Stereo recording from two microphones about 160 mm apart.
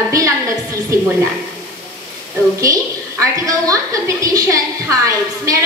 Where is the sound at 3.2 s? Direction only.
20° right (ahead or behind).